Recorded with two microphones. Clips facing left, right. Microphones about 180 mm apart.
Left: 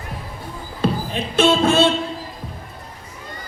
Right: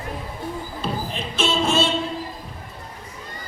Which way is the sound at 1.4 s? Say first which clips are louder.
Left 6 dB; 60° left (ahead or behind).